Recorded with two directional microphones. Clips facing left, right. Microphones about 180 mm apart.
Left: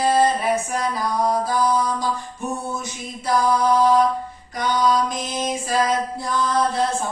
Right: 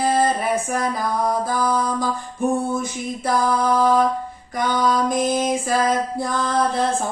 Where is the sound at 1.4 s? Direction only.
55° right (ahead or behind).